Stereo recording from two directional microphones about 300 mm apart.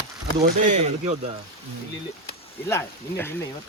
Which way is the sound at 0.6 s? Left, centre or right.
Right.